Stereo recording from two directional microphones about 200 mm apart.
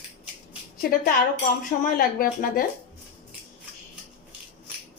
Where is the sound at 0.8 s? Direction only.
45° left (ahead or behind).